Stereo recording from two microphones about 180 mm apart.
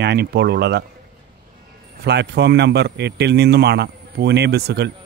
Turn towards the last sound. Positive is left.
turn(degrees=-65)  # may be behind; listen again after turning